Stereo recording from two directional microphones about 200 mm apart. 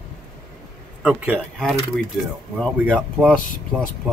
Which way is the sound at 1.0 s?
5° right (ahead or behind).